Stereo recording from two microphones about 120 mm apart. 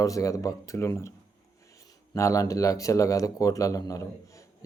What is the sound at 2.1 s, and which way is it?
Speech, 25° left (ahead or behind).